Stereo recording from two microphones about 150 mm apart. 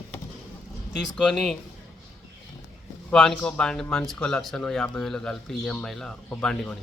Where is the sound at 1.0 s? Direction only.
5° left (ahead or behind).